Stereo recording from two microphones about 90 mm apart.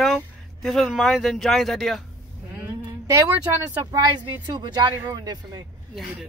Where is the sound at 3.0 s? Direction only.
35° right (ahead or behind).